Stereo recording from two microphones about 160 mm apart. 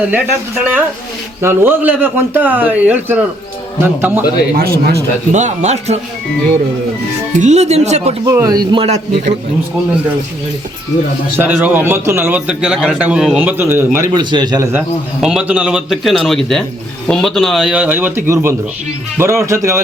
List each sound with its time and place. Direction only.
0.1 s a man's voice: 10° right (ahead or behind)
4.5 s speech: 70° right (ahead or behind)
5.3 s speech: 45° right (ahead or behind)
7.3 s speech: 45° right (ahead or behind)
8.2 s speech: 20° right (ahead or behind)
8.8 s speech: 45° right (ahead or behind)
11.3 s a man's voice: 10° right (ahead or behind)
14.1 s speech: 25° right (ahead or behind)
14.7 s a man's voice: 5° right (ahead or behind)